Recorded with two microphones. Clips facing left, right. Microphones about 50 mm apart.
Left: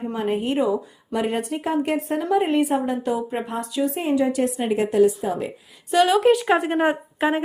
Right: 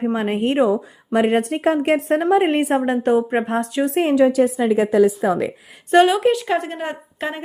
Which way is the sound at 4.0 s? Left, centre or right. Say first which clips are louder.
Right 7 dB; right.